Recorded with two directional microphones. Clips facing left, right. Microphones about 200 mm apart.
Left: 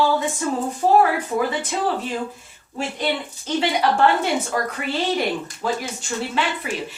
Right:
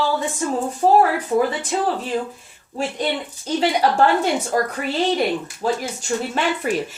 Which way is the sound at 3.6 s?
40° right (ahead or behind).